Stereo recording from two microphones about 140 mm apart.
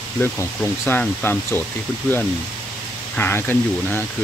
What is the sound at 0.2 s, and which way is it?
Speech, 15° left (ahead or behind).